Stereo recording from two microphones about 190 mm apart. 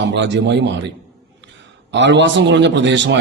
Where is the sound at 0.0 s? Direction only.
70° right (ahead or behind).